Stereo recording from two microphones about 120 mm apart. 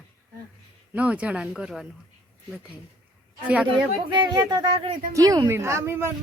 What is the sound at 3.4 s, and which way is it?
Speech, 10° right (ahead or behind).